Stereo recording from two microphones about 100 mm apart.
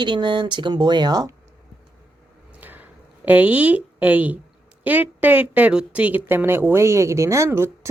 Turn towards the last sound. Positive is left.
turn(degrees=-25)  # may be behind; listen again after turning